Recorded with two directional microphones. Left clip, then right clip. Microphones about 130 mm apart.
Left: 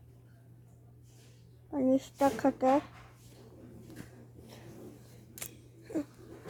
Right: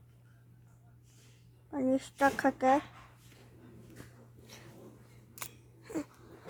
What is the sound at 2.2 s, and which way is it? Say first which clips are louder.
Speech: right 2 dB; 35° right (ahead or behind).